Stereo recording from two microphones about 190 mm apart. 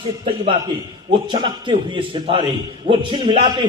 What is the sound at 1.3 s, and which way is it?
A man's voice, 25° right (ahead or behind).